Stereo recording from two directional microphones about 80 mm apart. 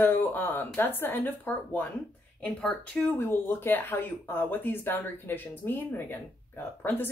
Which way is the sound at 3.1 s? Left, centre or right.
Left.